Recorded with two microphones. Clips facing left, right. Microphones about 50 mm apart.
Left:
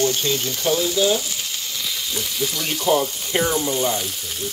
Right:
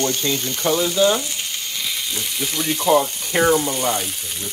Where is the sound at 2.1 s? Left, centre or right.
Right.